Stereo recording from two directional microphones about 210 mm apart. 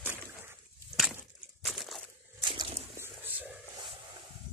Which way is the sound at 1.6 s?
Centre (ahead or behind).